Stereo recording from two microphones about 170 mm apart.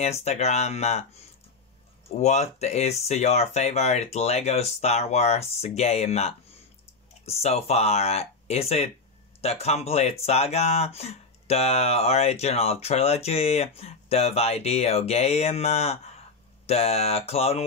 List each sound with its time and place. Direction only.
0.0 s speech: 40° left (ahead or behind)
2.0 s speech: 40° left (ahead or behind)